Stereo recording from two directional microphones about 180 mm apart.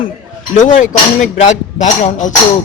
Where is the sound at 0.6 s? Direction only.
45° left (ahead or behind).